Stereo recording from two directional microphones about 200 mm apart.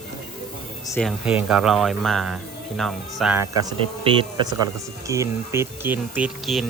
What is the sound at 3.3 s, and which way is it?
Speech, 20° right (ahead or behind).